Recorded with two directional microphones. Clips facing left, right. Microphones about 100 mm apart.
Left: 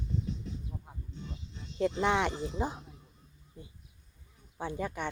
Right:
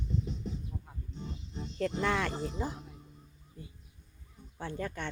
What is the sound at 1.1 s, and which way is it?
Music, 35° right (ahead or behind).